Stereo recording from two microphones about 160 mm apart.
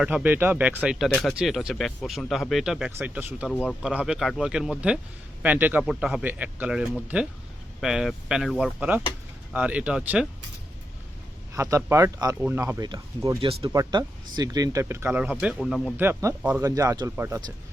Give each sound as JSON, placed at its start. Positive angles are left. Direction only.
{"t": 0.0, "sound": "speech", "side_deg": -10}
{"t": 3.5, "sound": "speech", "side_deg": 10}
{"t": 3.8, "sound": "speech", "side_deg": -5}
{"t": 11.5, "sound": "speech", "side_deg": -15}